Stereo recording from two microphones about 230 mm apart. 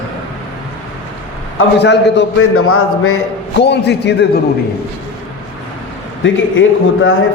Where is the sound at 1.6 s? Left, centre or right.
Left.